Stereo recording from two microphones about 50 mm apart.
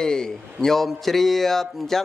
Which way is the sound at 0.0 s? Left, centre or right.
Centre.